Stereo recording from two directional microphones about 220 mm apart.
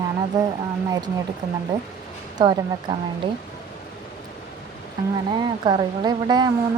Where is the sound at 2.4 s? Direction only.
20° right (ahead or behind).